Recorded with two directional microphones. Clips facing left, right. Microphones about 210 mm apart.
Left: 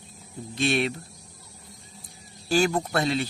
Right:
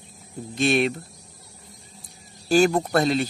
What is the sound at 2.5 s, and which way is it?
Speech, 45° right (ahead or behind).